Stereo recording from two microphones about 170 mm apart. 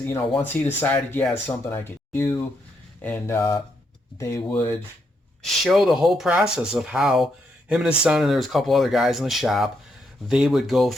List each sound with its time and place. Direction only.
0.0 s speech: 10° left (ahead or behind)